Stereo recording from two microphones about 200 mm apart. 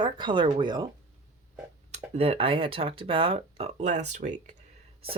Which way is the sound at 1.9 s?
30° right (ahead or behind).